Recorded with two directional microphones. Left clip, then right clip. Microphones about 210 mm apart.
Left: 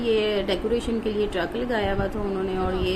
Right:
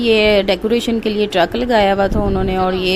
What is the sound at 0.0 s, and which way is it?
A woman's voice, 45° right (ahead or behind).